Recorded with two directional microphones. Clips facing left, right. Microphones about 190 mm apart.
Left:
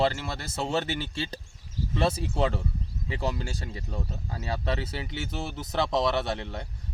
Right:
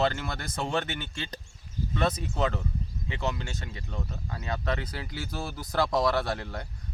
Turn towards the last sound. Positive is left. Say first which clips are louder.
# even
turn(degrees=25)  # may be behind; listen again after turning